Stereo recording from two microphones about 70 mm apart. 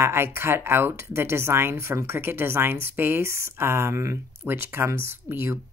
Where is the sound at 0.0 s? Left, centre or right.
Right.